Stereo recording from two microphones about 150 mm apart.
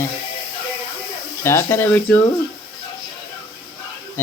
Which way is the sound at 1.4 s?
20° left (ahead or behind).